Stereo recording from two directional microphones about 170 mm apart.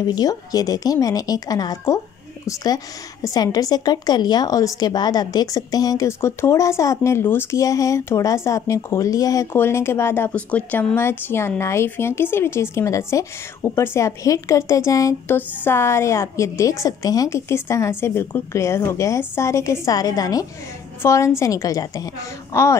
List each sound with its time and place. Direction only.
0.0 s a woman's voice: 25° left (ahead or behind)